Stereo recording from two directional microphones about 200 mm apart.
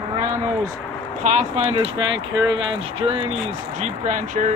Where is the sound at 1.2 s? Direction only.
35° right (ahead or behind).